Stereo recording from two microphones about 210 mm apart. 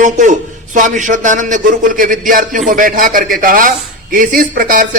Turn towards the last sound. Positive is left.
turn(degrees=-40)  # may be behind; listen again after turning